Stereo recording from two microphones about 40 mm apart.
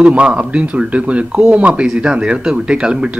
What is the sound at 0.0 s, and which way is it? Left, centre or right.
Speech, right.